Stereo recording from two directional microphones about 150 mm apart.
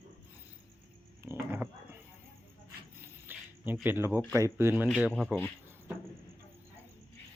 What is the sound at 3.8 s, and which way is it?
Speech, 15° right (ahead or behind).